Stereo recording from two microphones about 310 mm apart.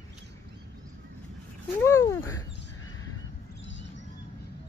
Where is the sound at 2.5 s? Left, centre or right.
Left.